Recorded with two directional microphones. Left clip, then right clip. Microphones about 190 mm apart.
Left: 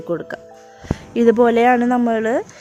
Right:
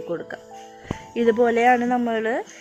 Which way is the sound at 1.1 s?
55° left (ahead or behind).